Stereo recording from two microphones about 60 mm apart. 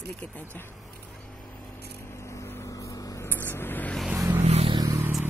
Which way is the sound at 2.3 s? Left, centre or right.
Left.